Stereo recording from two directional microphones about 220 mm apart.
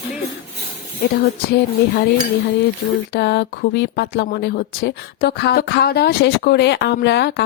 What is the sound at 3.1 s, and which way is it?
A woman's voice, 50° left (ahead or behind).